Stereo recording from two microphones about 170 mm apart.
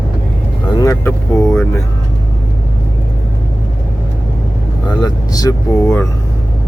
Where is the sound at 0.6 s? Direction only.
20° left (ahead or behind).